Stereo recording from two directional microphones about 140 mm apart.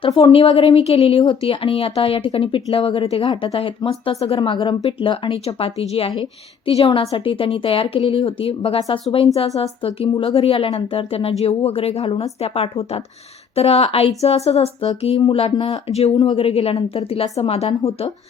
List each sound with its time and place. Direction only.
0.2 s speech: 40° left (ahead or behind)
4.4 s a woman's voice: 35° left (ahead or behind)